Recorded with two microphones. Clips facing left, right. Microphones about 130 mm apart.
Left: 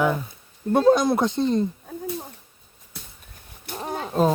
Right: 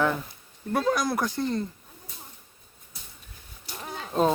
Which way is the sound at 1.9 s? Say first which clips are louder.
Left 17 dB; 70° left (ahead or behind).